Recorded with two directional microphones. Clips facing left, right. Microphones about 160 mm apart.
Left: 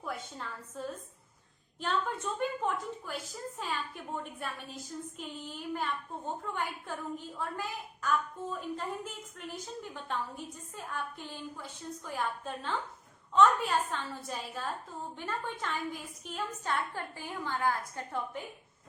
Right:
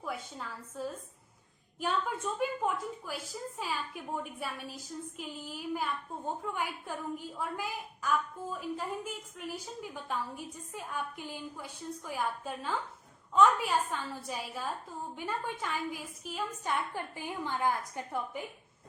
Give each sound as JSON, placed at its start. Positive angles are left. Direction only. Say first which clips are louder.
{"t": 0.0, "sound": "a woman's voice", "louder": "even", "side_deg": -5}
{"t": 16.9, "sound": "a woman's voice", "louder": "right 1 dB", "side_deg": -15}